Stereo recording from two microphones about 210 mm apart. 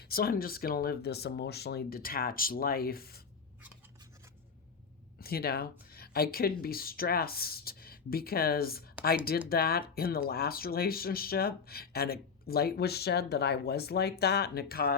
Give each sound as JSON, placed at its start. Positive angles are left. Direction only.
{"t": 0.0, "sound": "speech", "side_deg": 45}
{"t": 5.2, "sound": "speech", "side_deg": 45}